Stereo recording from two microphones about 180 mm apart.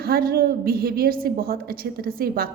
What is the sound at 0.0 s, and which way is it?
A woman's voice, 55° right (ahead or behind).